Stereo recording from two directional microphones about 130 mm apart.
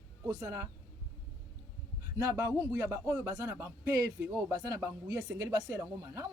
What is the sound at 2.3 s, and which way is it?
Speech, 25° right (ahead or behind).